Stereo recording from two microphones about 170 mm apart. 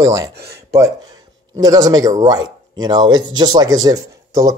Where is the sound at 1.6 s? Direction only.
20° right (ahead or behind).